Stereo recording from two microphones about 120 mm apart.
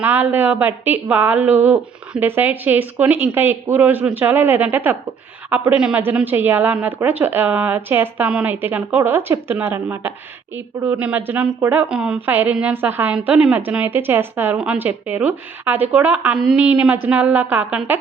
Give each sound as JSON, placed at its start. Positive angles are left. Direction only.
{"t": 0.0, "sound": "a woman's voice", "side_deg": -15}
{"t": 8.3, "sound": "a woman's voice", "side_deg": -5}